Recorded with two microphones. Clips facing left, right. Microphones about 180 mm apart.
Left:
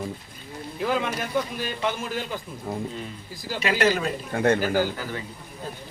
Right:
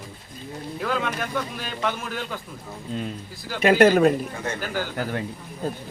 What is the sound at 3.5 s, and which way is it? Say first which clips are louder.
Speech: right 7 dB; 50° right (ahead or behind).